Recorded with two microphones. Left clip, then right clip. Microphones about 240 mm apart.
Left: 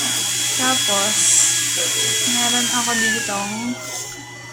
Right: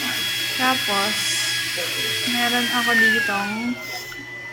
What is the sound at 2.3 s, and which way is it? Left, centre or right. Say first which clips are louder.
Speech: left 1 dB; centre.